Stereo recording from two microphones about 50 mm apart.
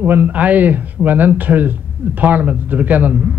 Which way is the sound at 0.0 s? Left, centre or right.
Right.